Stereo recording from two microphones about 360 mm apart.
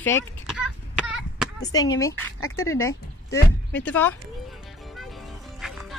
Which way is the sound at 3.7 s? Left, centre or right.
Centre.